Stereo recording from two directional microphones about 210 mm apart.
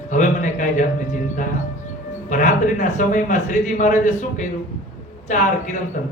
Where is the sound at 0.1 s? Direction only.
35° left (ahead or behind).